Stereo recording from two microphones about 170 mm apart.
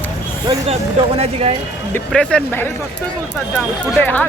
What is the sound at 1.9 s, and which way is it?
Speech, 10° left (ahead or behind).